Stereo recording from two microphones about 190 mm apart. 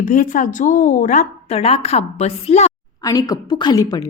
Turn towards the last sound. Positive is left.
turn(degrees=20)  # may be behind; listen again after turning